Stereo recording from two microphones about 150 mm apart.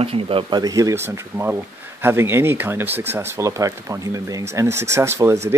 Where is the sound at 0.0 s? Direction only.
40° right (ahead or behind).